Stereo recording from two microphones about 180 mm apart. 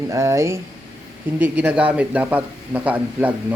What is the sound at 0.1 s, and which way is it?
Speech, 15° right (ahead or behind).